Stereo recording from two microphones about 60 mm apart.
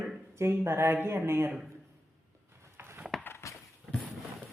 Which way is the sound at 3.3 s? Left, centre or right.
Left.